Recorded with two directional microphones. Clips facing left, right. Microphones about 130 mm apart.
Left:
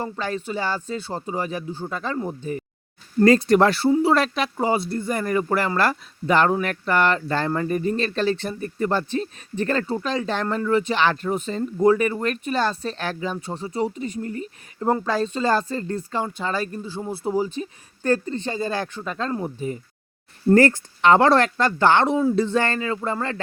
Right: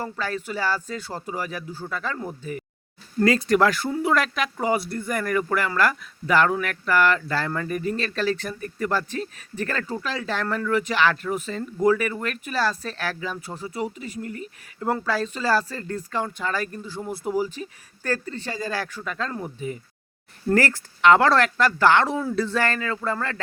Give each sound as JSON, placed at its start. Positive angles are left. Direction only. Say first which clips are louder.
{"t": 0.0, "sound": "speech", "louder": "left 2 dB", "side_deg": 20}
{"t": 2.4, "sound": "speech", "louder": "left 4 dB", "side_deg": 30}
{"t": 20.5, "sound": "speech", "louder": "left 6 dB", "side_deg": 25}